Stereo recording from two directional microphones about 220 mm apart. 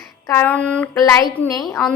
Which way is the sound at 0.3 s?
10° left (ahead or behind).